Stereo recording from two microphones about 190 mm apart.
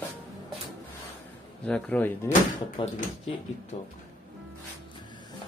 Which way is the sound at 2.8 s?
25° left (ahead or behind).